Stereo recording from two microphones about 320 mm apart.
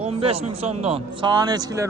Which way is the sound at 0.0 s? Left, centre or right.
Centre.